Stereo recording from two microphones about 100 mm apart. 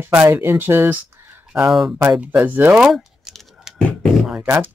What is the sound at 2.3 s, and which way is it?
Speech, 20° right (ahead or behind).